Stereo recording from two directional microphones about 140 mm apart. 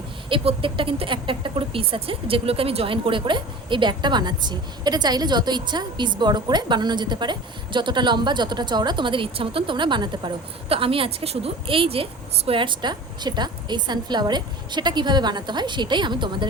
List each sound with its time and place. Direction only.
0.3 s speech: 40° right (ahead or behind)